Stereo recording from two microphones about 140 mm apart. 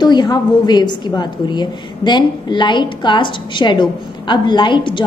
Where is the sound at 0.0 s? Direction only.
30° left (ahead or behind).